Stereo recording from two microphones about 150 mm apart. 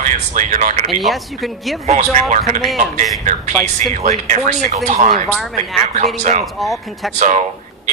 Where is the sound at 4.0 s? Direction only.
50° right (ahead or behind).